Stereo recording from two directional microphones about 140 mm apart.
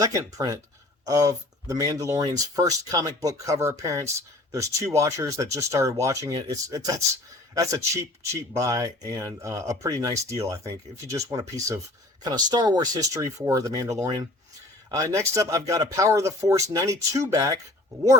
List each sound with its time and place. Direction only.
0.0 s speech: 25° right (ahead or behind)